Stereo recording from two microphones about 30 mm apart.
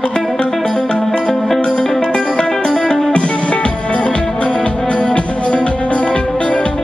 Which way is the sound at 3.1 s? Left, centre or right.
Left.